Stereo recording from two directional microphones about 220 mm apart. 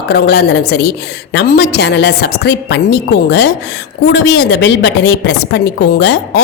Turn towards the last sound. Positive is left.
turn(degrees=50)  # may be behind; listen again after turning